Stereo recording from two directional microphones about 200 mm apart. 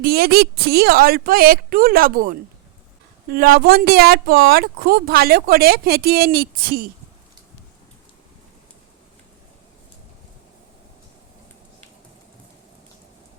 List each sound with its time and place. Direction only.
0.0 s speech: 50° right (ahead or behind)